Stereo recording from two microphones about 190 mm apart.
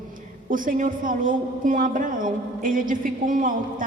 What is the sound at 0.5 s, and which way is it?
A man's voice, 45° right (ahead or behind).